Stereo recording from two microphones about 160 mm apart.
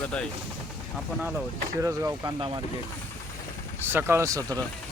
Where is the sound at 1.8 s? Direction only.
20° right (ahead or behind).